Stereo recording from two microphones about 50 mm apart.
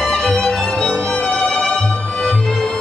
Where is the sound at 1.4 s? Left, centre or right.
Centre.